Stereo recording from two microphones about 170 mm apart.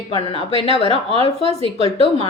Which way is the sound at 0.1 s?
30° left (ahead or behind).